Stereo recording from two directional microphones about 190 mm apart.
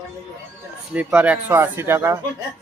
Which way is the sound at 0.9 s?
5° right (ahead or behind).